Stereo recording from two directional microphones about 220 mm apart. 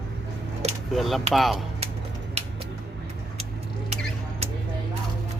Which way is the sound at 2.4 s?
30° right (ahead or behind).